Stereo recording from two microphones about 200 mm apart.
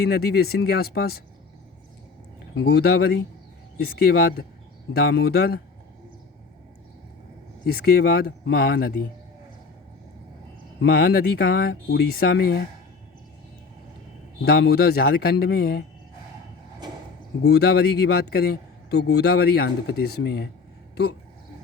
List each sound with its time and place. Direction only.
0.1 s a man's voice: 50° left (ahead or behind)
2.7 s a man's voice: 50° left (ahead or behind)
7.7 s a man's voice: 50° left (ahead or behind)
10.8 s a man's voice: 50° left (ahead or behind)
14.4 s a man's voice: 50° left (ahead or behind)
17.4 s a man's voice: 55° left (ahead or behind)